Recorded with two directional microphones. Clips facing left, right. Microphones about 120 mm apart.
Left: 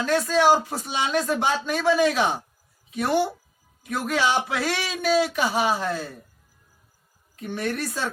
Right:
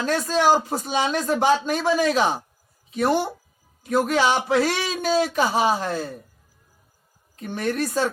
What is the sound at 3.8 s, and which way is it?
A man's voice, 30° right (ahead or behind).